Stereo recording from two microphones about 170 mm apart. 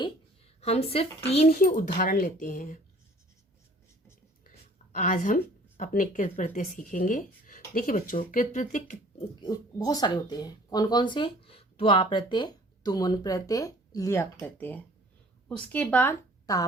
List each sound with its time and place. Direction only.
0.6 s a woman's voice: 35° left (ahead or behind)
4.9 s a woman's voice: 55° left (ahead or behind)
9.4 s speech: 20° left (ahead or behind)